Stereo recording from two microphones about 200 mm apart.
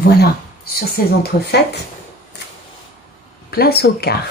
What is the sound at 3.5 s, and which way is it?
Speech, 50° left (ahead or behind).